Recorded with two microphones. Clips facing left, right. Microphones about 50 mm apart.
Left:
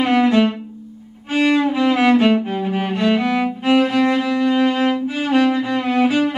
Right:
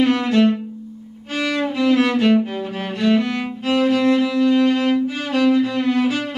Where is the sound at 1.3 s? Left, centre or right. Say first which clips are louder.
Left 6 dB; left.